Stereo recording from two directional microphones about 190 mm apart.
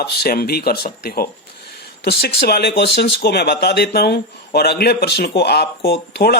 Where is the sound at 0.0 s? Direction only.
55° left (ahead or behind).